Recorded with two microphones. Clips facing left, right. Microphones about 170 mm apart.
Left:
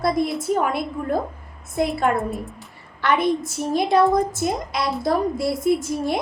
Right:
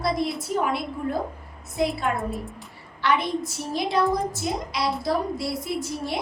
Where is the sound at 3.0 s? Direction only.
50° left (ahead or behind).